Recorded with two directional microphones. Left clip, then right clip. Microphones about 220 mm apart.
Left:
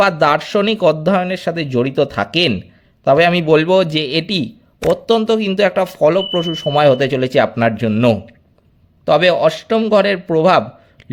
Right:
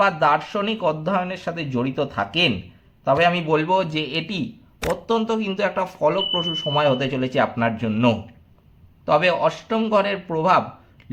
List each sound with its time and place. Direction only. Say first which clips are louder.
0.0 s speech: left 5 dB; 45° left (ahead or behind)
4.8 s speech: left 9 dB; centre (ahead or behind)
5.0 s speech: left 8 dB; 40° left (ahead or behind)